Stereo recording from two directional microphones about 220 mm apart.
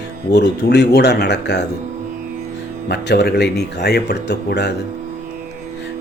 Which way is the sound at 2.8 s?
45° left (ahead or behind).